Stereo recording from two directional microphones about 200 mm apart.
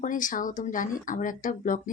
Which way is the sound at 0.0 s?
40° left (ahead or behind).